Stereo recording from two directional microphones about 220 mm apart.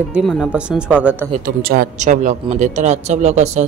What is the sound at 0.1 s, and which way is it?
Speech, centre (ahead or behind).